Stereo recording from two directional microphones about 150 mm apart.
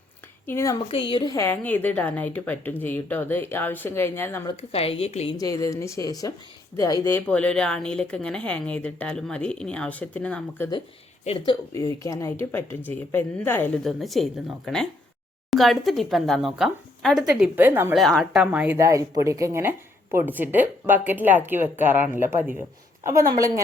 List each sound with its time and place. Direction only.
0.4 s speech: 20° left (ahead or behind)
0.9 s a woman's voice: 35° left (ahead or behind)
1.5 s speech: 10° left (ahead or behind)
4.7 s a woman's voice: 40° left (ahead or behind)
5.4 s speech: 25° left (ahead or behind)
7.3 s speech: 10° left (ahead or behind)
11.3 s a woman's voice: 40° left (ahead or behind)
11.7 s speech: 20° left (ahead or behind)
13.8 s speech: centre (ahead or behind)
17.9 s speech: centre (ahead or behind)
18.5 s speech: 10° right (ahead or behind)